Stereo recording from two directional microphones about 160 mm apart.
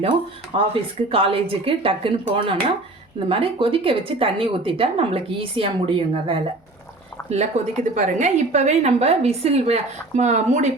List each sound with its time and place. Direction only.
0.5 s a woman's voice: 35° right (ahead or behind)